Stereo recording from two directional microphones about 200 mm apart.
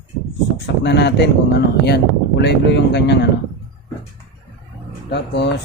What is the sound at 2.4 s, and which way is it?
Speech, 60° left (ahead or behind).